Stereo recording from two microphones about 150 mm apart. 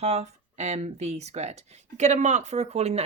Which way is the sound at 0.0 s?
45° right (ahead or behind).